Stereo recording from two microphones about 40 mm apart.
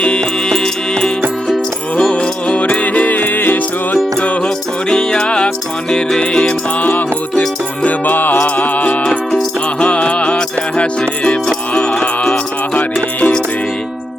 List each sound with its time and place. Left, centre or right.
0.0 s music: left
3.9 s music: left
4.4 s music: centre
6.7 s music: left
9.8 s music: left